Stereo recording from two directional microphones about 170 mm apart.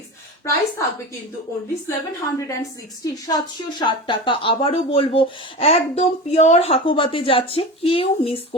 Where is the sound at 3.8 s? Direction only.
30° left (ahead or behind).